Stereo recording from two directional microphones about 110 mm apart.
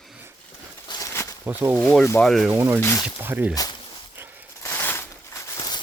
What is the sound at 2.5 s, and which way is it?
Speech, 20° right (ahead or behind).